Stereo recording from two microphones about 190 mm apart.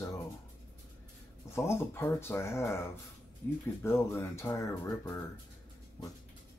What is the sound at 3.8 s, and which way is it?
Speech, 15° left (ahead or behind).